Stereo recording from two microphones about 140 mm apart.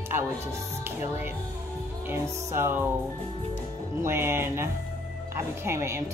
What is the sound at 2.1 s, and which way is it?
Speech, 15° right (ahead or behind).